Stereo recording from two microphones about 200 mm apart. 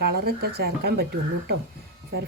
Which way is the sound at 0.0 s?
50° right (ahead or behind).